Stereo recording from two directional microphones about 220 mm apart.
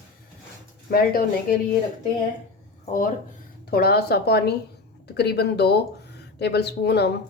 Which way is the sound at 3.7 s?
45° left (ahead or behind).